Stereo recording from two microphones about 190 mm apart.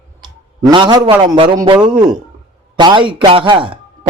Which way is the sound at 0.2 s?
25° right (ahead or behind).